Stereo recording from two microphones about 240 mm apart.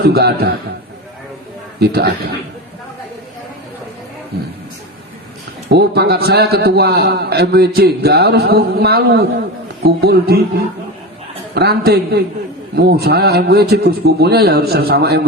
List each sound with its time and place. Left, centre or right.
0.0 s a man's voice: right
1.8 s a man's voice: right
5.7 s a man's voice: right
11.5 s a man's voice: right